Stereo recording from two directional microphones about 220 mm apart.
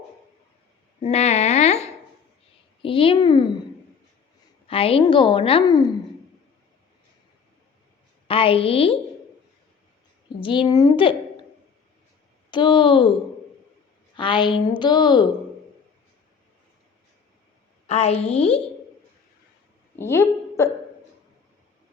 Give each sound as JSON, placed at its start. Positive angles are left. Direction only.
{"t": 1.0, "sound": "a sound", "side_deg": 30}
{"t": 2.8, "sound": "a sound", "side_deg": 25}
{"t": 4.7, "sound": "a woman's voice", "side_deg": 25}
{"t": 8.3, "sound": "a woman's voice", "side_deg": 25}
{"t": 10.4, "sound": "a woman's voice", "side_deg": 20}
{"t": 12.5, "sound": "a woman's voice", "side_deg": 20}
{"t": 14.2, "sound": "a woman's voice", "side_deg": 20}
{"t": 17.8, "sound": "a woman's voice", "side_deg": 30}
{"t": 20.0, "sound": "a sound", "side_deg": 10}